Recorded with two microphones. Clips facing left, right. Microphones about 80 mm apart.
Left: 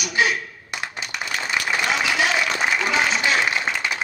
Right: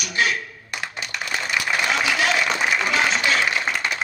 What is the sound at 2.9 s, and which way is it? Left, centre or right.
Applause, centre.